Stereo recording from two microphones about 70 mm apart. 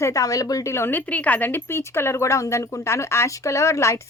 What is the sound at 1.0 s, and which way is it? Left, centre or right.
Speech, left.